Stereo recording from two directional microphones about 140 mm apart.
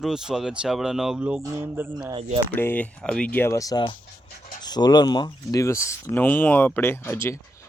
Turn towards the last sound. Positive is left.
turn(degrees=20)  # may be behind; listen again after turning